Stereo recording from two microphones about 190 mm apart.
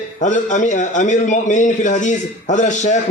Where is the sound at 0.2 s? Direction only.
40° left (ahead or behind).